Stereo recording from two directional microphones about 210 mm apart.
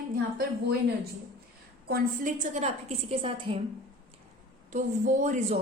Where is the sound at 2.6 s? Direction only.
30° right (ahead or behind).